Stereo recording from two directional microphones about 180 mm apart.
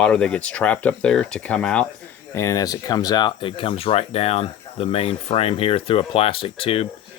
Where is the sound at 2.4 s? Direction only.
20° left (ahead or behind).